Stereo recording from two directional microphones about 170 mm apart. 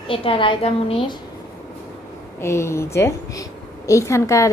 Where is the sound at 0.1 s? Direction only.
30° left (ahead or behind).